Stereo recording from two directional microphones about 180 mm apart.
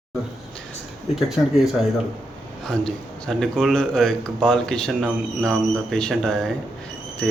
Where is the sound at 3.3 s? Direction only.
Centre (ahead or behind).